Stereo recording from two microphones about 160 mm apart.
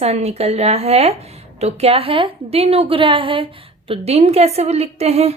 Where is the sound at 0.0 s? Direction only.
40° right (ahead or behind).